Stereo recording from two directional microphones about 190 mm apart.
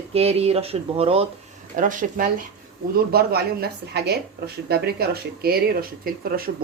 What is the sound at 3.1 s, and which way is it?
A woman's voice, 55° right (ahead or behind).